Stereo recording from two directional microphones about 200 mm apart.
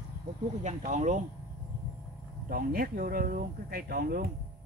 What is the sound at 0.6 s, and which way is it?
Speech, 35° right (ahead or behind).